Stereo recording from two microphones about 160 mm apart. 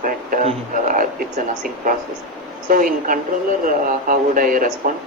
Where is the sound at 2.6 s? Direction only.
60° right (ahead or behind).